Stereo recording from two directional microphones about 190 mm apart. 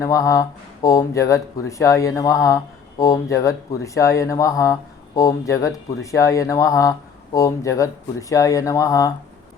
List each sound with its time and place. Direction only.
0.0 s speech: 15° left (ahead or behind)